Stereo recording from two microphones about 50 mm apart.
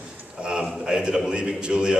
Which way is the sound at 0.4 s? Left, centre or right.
Centre.